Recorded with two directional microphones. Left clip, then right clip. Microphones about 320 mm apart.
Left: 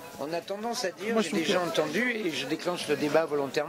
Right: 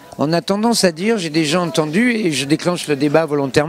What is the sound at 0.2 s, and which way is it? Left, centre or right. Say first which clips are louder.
Speech: right 16 dB; right.